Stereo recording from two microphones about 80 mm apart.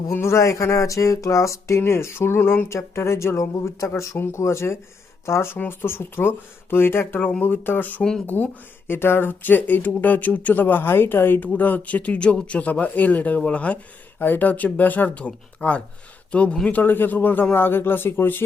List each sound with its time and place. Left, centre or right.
0.1 s speech: left